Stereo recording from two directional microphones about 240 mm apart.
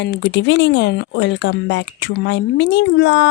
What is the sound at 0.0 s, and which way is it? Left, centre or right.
Speech, left.